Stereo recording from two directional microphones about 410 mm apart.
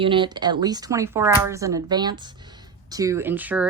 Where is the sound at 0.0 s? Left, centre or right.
Centre.